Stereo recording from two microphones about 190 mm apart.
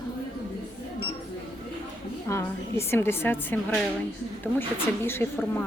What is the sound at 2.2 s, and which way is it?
A woman's voice, 15° left (ahead or behind).